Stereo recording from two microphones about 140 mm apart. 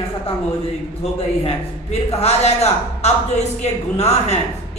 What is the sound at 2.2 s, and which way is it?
A woman's voice, 50° left (ahead or behind).